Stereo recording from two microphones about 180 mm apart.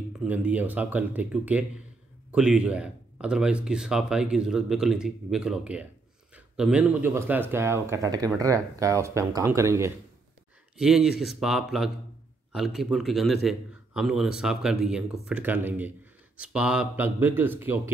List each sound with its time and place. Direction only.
0.2 s speech: 10° right (ahead or behind)
10.8 s speech: 5° right (ahead or behind)